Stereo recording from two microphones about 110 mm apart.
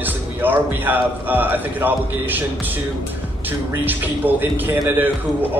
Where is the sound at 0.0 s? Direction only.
15° right (ahead or behind).